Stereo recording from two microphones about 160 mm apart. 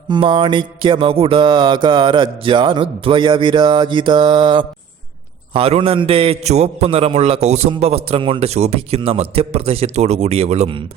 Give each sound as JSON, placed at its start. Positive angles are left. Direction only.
{"t": 0.1, "sound": "music", "side_deg": -30}
{"t": 7.4, "sound": "a man's voice", "side_deg": -45}
{"t": 7.7, "sound": "music", "side_deg": -40}